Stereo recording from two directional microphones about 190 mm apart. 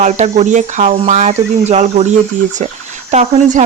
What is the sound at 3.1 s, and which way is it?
Speech, 35° right (ahead or behind).